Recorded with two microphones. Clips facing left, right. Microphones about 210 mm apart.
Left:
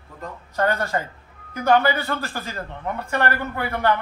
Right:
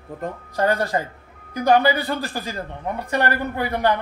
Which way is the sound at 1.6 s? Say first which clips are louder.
Right 1 dB; 15° right (ahead or behind).